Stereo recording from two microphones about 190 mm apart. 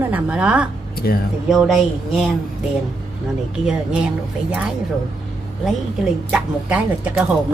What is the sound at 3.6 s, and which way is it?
Speech, 5° right (ahead or behind).